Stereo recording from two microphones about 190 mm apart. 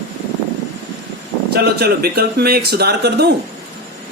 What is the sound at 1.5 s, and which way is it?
Speech, 55° right (ahead or behind).